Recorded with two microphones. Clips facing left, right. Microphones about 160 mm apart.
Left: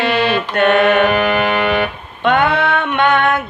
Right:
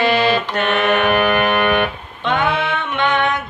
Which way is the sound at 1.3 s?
10° left (ahead or behind).